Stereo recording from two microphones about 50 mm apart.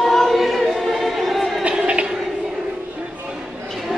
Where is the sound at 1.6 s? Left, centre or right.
Right.